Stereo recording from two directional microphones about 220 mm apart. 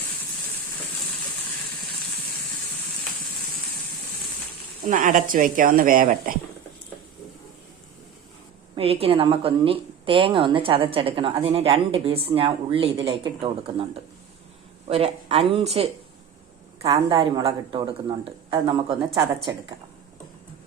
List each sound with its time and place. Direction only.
4.9 s speech: 35° right (ahead or behind)
8.7 s a woman's voice: 25° right (ahead or behind)
17.2 s a woman's voice: 25° right (ahead or behind)